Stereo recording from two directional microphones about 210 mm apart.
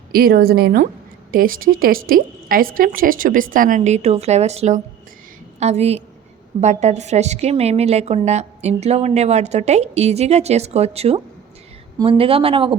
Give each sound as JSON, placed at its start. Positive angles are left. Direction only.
{"t": 0.1, "sound": "a woman's voice", "side_deg": -45}